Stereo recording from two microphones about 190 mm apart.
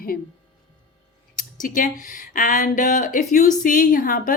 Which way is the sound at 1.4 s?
45° left (ahead or behind).